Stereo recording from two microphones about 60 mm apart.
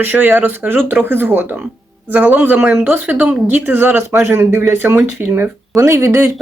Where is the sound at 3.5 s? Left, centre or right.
Right.